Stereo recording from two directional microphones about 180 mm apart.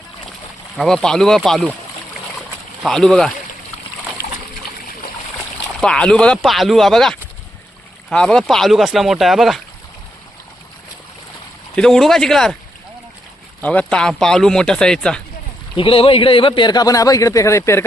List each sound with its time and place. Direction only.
0.8 s speech: centre (ahead or behind)
2.8 s speech: 5° left (ahead or behind)
5.8 s speech: 5° left (ahead or behind)
11.8 s speech: centre (ahead or behind)
13.6 s speech: 10° left (ahead or behind)
15.7 s a man's voice: 30° left (ahead or behind)